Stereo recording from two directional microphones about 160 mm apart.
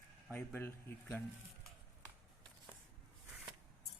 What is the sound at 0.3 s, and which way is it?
Speech, 15° left (ahead or behind).